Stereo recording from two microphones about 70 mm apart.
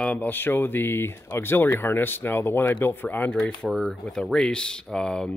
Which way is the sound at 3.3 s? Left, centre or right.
Centre.